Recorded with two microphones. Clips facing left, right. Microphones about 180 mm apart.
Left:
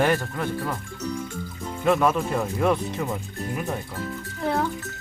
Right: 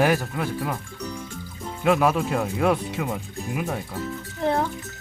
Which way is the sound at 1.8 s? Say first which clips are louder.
Right 1 dB; 5° right (ahead or behind).